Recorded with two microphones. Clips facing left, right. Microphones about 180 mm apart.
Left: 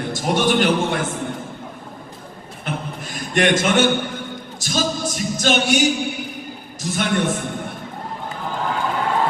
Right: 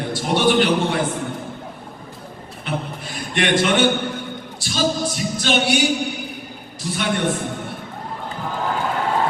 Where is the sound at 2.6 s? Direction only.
45° left (ahead or behind).